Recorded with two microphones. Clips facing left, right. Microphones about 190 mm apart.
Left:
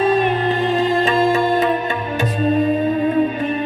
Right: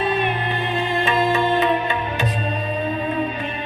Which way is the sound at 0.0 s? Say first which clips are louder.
Left 6 dB; 40° left (ahead or behind).